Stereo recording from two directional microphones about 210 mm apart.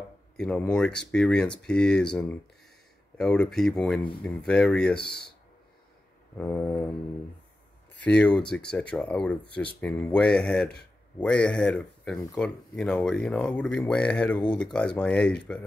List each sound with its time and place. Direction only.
0.4 s speech: 5° left (ahead or behind)
6.3 s mantra: 10° left (ahead or behind)
7.9 s speech: 5° left (ahead or behind)